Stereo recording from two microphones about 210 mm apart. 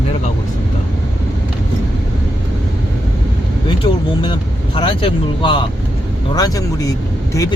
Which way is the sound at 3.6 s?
20° left (ahead or behind).